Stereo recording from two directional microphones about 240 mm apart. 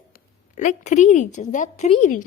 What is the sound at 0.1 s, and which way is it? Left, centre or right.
A woman's voice, left.